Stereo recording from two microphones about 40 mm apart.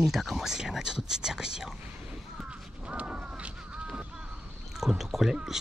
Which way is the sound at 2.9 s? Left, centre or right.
Right.